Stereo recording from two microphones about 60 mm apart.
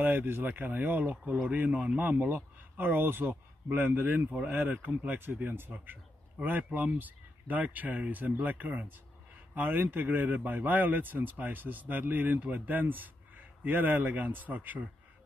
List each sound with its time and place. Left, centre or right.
0.0 s speech: right